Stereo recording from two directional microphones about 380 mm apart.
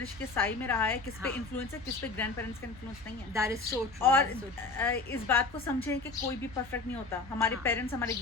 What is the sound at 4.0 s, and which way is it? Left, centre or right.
A woman's voice, centre.